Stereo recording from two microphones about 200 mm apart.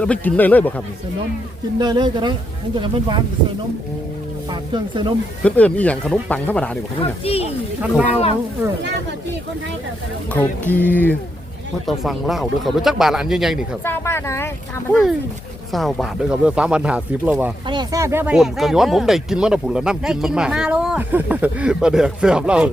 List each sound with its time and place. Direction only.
0.0 s speech: 5° left (ahead or behind)
1.8 s speech: 20° right (ahead or behind)
4.7 s speech: 25° right (ahead or behind)
5.4 s speech: 5° left (ahead or behind)
7.0 s speech: 30° left (ahead or behind)
7.8 s speech: 5° right (ahead or behind)
8.8 s speech: 60° right (ahead or behind)
10.7 s speech: 10° left (ahead or behind)
13.8 s speech: 10° left (ahead or behind)
15.7 s speech: centre (ahead or behind)
17.7 s speech: 20° right (ahead or behind)